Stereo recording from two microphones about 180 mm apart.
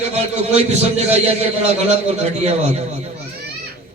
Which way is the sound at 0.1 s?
35° right (ahead or behind).